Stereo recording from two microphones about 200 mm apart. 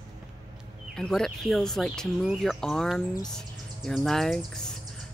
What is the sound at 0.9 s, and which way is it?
Speech, 5° left (ahead or behind).